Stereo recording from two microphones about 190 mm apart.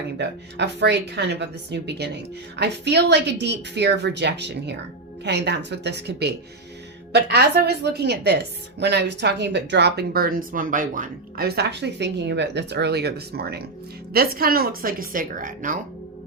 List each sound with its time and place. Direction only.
0.2 s a woman's voice: 65° right (ahead or behind); by 15.8 s 45° right (ahead or behind)